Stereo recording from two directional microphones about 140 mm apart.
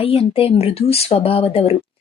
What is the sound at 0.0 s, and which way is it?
Speech, 40° left (ahead or behind).